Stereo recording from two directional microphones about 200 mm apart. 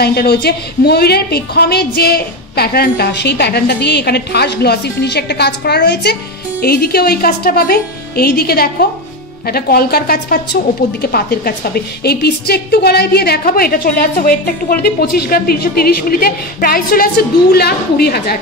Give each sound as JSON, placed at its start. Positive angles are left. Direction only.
{"t": 0.0, "sound": "a woman's voice", "side_deg": 50}